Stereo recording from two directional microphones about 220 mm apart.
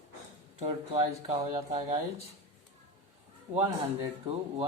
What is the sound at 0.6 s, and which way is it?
Speech, 30° right (ahead or behind).